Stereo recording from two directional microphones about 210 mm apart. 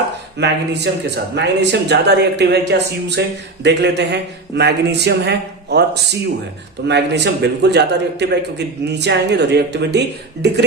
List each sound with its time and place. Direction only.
0.3 s speech: 55° right (ahead or behind)